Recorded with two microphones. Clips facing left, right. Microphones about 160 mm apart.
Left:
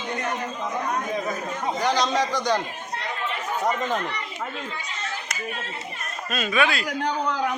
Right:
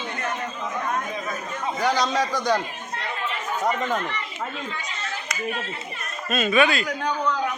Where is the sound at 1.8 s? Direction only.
5° right (ahead or behind).